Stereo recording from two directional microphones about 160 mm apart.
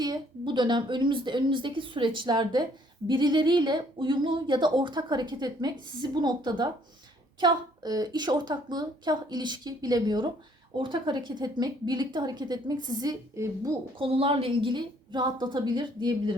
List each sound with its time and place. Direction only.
0.0 s speech: 25° right (ahead or behind)
14.0 s speech: 35° right (ahead or behind)